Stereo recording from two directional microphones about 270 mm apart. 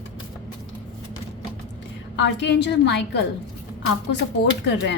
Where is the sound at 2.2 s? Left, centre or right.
Left.